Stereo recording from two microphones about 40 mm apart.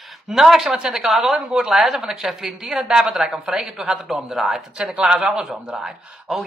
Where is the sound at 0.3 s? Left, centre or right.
Centre.